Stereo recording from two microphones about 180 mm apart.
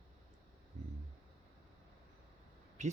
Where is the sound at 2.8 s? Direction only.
40° right (ahead or behind).